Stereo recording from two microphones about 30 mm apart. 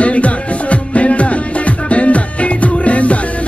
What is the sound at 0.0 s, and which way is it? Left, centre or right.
Music, left.